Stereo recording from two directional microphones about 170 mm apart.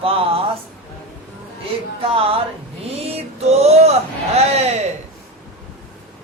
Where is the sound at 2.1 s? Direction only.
35° right (ahead or behind).